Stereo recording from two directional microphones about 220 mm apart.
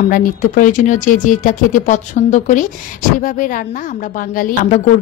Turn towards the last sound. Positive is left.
turn(degrees=40)  # may be behind; listen again after turning